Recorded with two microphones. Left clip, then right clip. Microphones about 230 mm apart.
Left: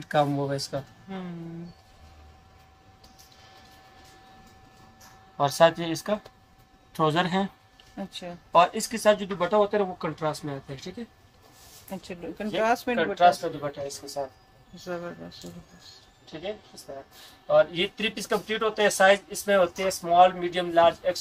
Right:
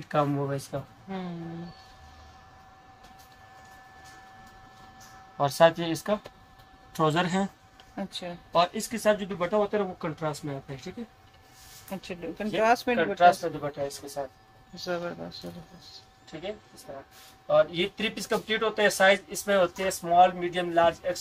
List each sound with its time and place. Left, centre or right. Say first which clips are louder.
0.2 s speech: left 2 dB; centre
5.4 s speech: left 1 dB; centre
7.9 s speech: right 2 dB; centre
8.9 s speech: left 1 dB; centre
11.9 s speech: right 1 dB; centre
14.8 s a man's voice: right 3 dB; centre
17.5 s speech: left 2 dB; centre
19.4 s speech: left 2 dB; centre